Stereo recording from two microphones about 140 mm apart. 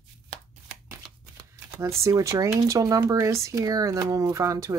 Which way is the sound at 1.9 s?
20° right (ahead or behind).